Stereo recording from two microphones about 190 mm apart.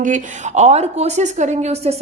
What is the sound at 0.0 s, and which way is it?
A woman's voice, 40° right (ahead or behind).